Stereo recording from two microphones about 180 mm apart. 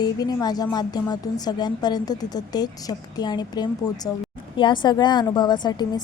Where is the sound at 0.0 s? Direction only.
20° left (ahead or behind).